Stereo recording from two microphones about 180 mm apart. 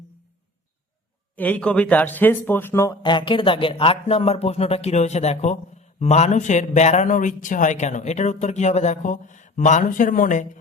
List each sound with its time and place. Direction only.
1.4 s a man's voice: 10° left (ahead or behind); by 10.4 s 45° left (ahead or behind)